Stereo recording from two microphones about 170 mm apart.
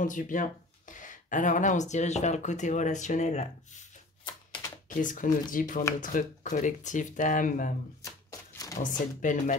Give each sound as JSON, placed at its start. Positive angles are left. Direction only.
{"t": 0.0, "sound": "speech", "side_deg": 50}
{"t": 4.8, "sound": "speech", "side_deg": 50}
{"t": 8.0, "sound": "shuffling cards", "side_deg": 20}
{"t": 8.7, "sound": "speech", "side_deg": 50}